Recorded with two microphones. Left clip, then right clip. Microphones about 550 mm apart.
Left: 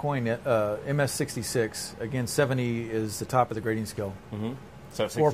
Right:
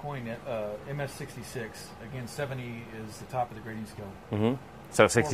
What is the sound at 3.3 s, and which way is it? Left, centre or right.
Speech, left.